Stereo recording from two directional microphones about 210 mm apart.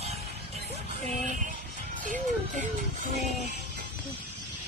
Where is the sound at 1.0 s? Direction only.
35° right (ahead or behind).